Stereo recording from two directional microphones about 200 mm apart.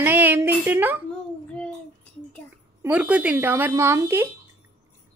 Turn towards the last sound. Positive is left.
turn(degrees=-10)  # may be behind; listen again after turning